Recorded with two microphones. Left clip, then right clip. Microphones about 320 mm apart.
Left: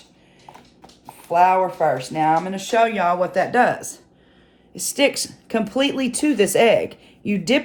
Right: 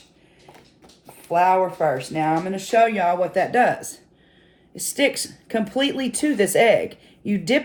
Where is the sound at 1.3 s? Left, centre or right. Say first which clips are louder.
Left 2 dB; left.